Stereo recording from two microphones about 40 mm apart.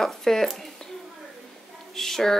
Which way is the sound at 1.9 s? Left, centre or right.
Centre.